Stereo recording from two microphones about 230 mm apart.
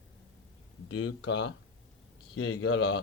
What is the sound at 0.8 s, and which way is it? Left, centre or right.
Speech, left.